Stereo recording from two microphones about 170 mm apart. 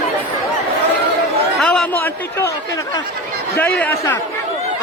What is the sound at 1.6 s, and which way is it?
Speech, 5° left (ahead or behind).